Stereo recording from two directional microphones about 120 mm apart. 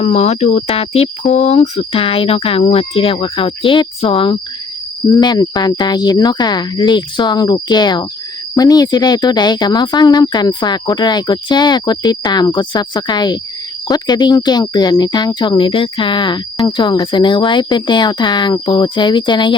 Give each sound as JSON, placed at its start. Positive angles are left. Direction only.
{"t": 0.0, "sound": "speech", "side_deg": 65}
{"t": 1.8, "sound": "speech", "side_deg": 50}
{"t": 5.0, "sound": "speech", "side_deg": 30}